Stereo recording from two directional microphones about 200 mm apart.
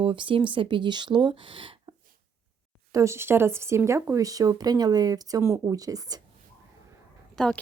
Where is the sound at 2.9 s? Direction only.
15° right (ahead or behind).